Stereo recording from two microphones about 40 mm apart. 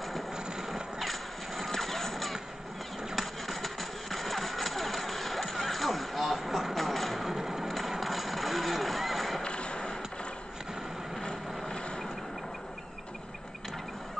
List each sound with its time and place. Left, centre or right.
0.6 s vehicle: centre
1.7 s music: centre
3.2 s engine: centre
7.2 s printer: centre
8.0 s vehicle: centre
9.4 s a sound: left
11.1 s vehicle: left